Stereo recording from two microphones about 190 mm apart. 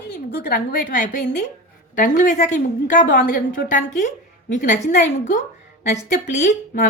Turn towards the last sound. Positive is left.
turn(degrees=40)  # may be behind; listen again after turning